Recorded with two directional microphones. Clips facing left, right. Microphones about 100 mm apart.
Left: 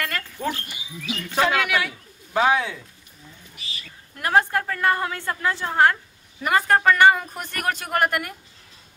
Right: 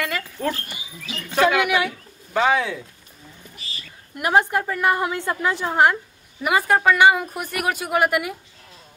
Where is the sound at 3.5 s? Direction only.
35° right (ahead or behind).